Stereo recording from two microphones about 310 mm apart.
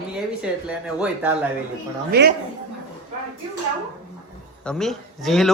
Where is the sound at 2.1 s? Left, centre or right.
Right.